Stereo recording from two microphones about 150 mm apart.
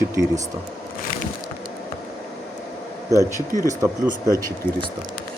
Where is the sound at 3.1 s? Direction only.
20° right (ahead or behind).